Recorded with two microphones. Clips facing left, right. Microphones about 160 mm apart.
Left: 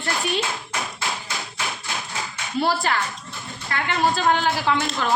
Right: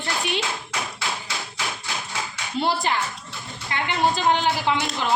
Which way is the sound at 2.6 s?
20° right (ahead or behind).